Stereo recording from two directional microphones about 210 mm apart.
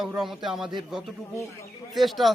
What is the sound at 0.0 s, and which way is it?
Speech, centre (ahead or behind).